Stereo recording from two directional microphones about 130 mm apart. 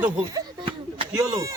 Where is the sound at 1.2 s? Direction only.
25° right (ahead or behind).